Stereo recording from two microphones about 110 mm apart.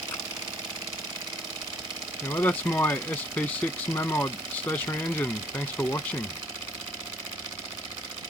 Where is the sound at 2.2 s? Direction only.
25° left (ahead or behind).